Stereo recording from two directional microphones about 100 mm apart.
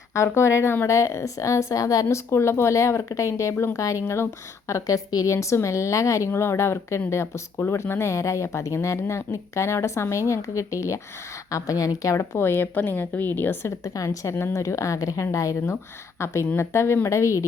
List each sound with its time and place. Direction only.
0.1 s a woman's voice: 30° left (ahead or behind)
13.8 s a woman's voice: 35° left (ahead or behind)